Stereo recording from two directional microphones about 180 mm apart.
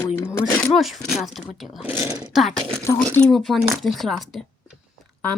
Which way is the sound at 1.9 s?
15° right (ahead or behind).